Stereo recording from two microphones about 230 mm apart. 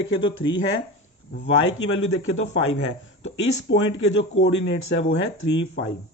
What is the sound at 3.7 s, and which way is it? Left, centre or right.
Speech, left.